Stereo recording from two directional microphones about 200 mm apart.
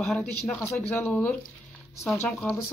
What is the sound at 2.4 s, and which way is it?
Speech, 5° left (ahead or behind).